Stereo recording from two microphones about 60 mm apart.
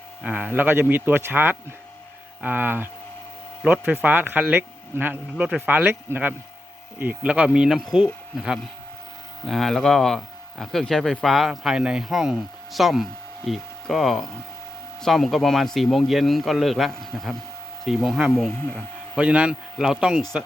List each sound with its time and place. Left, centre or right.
0.3 s speech: right
7.0 s speech: right
9.5 s speech: centre
19.1 s speech: right